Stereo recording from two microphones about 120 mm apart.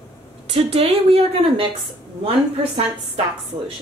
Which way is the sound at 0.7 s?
50° right (ahead or behind).